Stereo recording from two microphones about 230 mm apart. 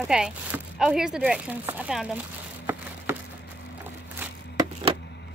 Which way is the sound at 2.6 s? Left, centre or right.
Centre.